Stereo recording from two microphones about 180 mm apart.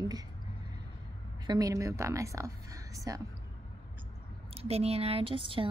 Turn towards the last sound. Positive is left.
turn(degrees=-30)  # may be behind; listen again after turning